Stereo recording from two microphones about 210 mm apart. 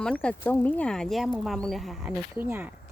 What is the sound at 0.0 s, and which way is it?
Speech, 5° left (ahead or behind).